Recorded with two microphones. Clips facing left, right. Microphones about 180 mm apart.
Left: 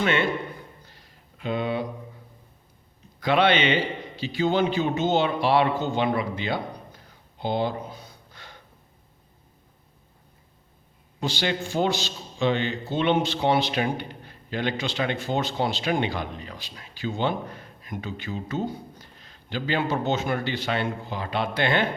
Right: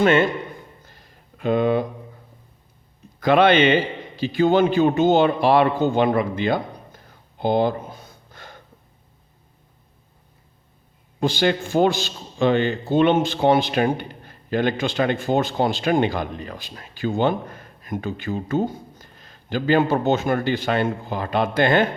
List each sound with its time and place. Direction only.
0.0 s a man's voice: 45° right (ahead or behind)
0.9 s a sound: 50° right (ahead or behind)
3.2 s a man's voice: 50° right (ahead or behind)
11.2 s a man's voice: 50° right (ahead or behind)